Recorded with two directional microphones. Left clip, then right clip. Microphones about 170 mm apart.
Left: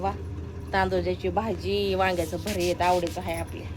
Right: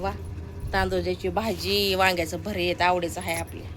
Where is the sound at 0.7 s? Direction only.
5° right (ahead or behind).